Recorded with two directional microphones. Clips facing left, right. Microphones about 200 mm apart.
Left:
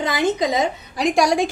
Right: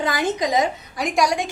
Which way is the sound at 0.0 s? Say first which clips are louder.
Left 2 dB; 25° left (ahead or behind).